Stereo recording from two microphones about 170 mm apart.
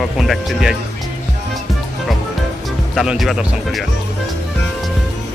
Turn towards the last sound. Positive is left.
turn(degrees=0)  # may be behind; listen again after turning